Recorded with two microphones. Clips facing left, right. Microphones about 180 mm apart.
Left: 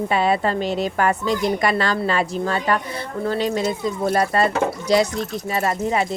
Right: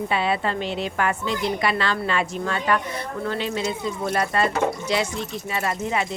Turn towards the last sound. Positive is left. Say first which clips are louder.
# left 4 dB
turn(degrees=40)  # may be behind; listen again after turning